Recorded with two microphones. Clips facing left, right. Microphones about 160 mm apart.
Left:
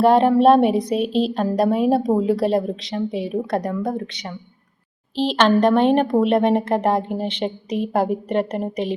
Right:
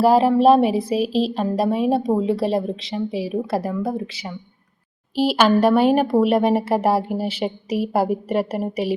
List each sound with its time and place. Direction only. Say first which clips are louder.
0.0 s speech: left 1 dB; 5° right (ahead or behind)